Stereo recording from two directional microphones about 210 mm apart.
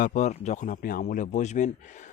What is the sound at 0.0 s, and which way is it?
Speech, 35° left (ahead or behind).